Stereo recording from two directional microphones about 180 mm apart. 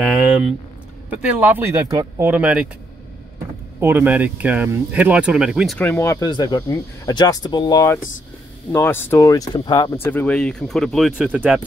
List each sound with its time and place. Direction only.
1.1 s speech: 10° right (ahead or behind)
3.8 s speech: 10° right (ahead or behind)
5.8 s speech: 15° left (ahead or behind)
10.0 s speech: 10° left (ahead or behind)